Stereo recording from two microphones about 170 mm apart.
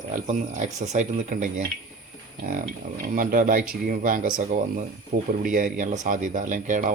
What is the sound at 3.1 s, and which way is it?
Speech, 55° right (ahead or behind).